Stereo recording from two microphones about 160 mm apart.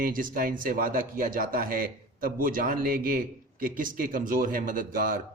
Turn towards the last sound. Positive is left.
turn(degrees=-60)  # may be behind; listen again after turning